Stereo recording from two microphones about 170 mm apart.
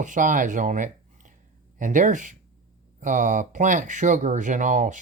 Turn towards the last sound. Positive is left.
turn(degrees=-50)  # may be behind; listen again after turning